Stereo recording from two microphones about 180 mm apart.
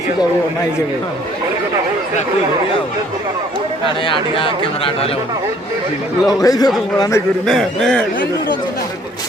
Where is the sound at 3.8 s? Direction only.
30° left (ahead or behind).